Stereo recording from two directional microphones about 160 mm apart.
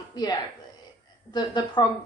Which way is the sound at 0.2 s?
25° left (ahead or behind).